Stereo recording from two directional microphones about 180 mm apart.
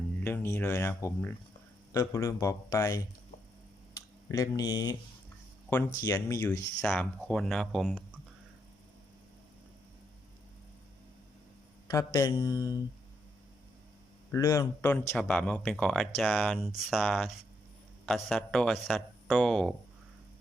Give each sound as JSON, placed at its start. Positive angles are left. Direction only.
{"t": 0.2, "sound": "speech", "side_deg": 10}
{"t": 4.3, "sound": "speech", "side_deg": 20}
{"t": 6.1, "sound": "speech", "side_deg": 15}
{"t": 6.8, "sound": "speech", "side_deg": 5}
{"t": 11.9, "sound": "speech", "side_deg": 20}
{"t": 14.3, "sound": "speech", "side_deg": 15}